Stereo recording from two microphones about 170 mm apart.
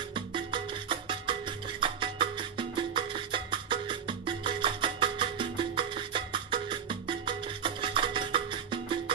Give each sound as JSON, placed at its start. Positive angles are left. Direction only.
{"t": 0.1, "sound": "music", "side_deg": -30}